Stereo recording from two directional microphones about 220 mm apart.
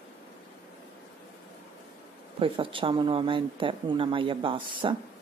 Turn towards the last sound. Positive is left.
turn(degrees=-20)  # may be behind; listen again after turning